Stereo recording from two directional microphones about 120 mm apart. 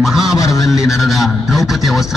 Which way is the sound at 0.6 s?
Centre (ahead or behind).